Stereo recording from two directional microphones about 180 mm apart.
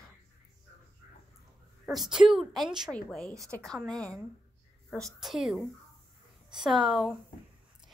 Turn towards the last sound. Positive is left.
turn(degrees=0)  # may be behind; listen again after turning